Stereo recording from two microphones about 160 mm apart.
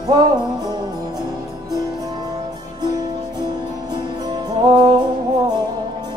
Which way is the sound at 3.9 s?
30° right (ahead or behind).